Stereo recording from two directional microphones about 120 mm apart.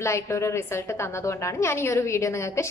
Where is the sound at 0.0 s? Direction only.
25° left (ahead or behind).